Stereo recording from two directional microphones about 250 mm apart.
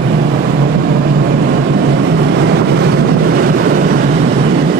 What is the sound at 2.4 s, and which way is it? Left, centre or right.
Vehicle, right.